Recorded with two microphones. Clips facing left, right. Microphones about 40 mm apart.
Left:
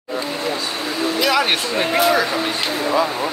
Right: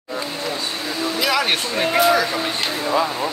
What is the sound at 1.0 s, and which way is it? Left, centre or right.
Speech, centre.